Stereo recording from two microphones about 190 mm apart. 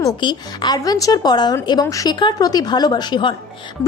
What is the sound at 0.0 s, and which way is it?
A woman's voice, 25° left (ahead or behind).